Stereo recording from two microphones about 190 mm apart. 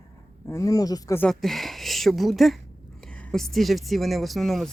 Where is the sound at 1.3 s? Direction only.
Centre (ahead or behind).